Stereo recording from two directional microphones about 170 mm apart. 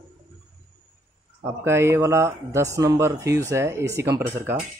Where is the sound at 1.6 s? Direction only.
15° right (ahead or behind).